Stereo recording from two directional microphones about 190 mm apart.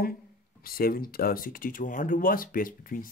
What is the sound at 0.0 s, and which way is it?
Speech, 50° left (ahead or behind).